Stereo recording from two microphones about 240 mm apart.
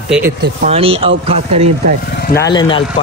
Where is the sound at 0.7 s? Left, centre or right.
Right.